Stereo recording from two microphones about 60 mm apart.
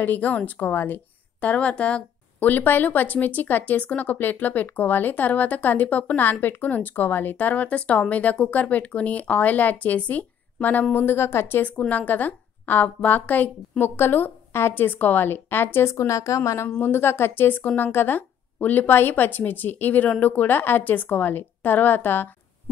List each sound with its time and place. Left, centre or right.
0.0 s speech: left
2.5 s speech: left
11.1 s a woman's voice: left
11.9 s speech: left
13.8 s speech: left
15.9 s a woman's voice: left
16.8 s speech: left